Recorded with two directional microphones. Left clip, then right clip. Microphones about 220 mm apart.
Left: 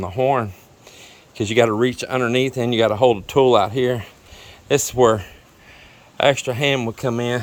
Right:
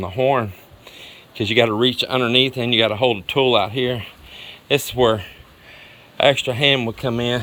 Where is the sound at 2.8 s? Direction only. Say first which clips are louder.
Left 4 dB; 25° left (ahead or behind).